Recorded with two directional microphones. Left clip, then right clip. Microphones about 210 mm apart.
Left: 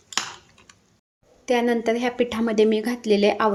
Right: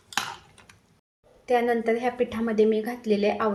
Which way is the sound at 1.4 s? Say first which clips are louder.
Left 2 dB; 50° left (ahead or behind).